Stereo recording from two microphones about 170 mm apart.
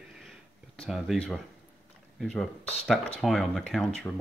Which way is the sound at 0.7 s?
Centre (ahead or behind).